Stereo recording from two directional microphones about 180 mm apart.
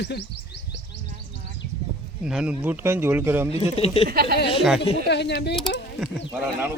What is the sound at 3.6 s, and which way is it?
Speech, 35° left (ahead or behind).